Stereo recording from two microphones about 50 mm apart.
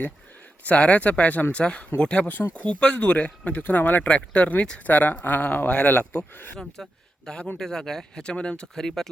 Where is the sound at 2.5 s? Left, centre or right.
Centre; by 4.1 s left.